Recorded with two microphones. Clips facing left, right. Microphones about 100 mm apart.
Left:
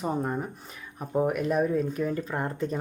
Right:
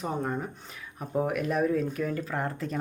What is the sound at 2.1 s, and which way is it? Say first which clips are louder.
Speech: left 2 dB; 30° left (ahead or behind).